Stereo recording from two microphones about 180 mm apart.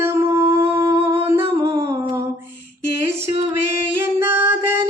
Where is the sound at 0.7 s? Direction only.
15° right (ahead or behind).